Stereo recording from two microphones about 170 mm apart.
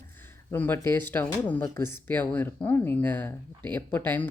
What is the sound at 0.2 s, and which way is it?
Speech, 10° left (ahead or behind).